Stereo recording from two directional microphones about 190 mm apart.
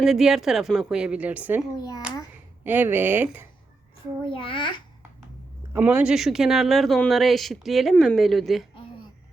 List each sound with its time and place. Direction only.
0.0 s speech: centre (ahead or behind)
2.6 s speech: 10° right (ahead or behind)
4.3 s a child's voice: 25° left (ahead or behind)
5.7 s speech: 10° right (ahead or behind)